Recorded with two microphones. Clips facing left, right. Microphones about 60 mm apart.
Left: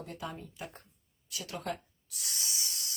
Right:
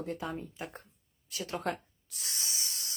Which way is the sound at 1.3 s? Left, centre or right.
Right.